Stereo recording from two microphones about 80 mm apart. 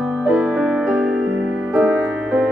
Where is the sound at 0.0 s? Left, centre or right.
Centre.